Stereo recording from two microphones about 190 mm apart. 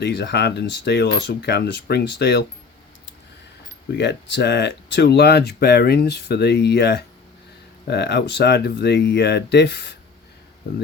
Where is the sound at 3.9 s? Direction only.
65° left (ahead or behind).